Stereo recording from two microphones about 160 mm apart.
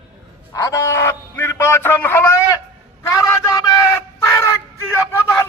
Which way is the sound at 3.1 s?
20° left (ahead or behind).